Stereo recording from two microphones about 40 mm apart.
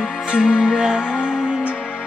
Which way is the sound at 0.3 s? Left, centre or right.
Right.